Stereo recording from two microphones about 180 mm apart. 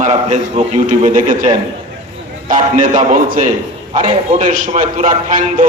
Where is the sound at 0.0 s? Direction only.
40° right (ahead or behind).